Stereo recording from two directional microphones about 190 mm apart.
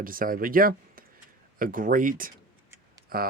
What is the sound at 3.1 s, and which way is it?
Speech, 50° right (ahead or behind).